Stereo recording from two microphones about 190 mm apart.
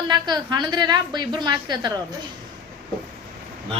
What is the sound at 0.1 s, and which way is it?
A woman's voice, 25° right (ahead or behind).